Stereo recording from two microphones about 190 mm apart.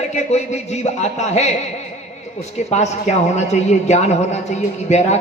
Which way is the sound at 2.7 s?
35° left (ahead or behind).